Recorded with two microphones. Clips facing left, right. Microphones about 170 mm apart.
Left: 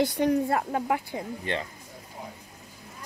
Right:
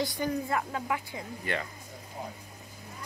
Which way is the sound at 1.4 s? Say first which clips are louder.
Even; 25° left (ahead or behind).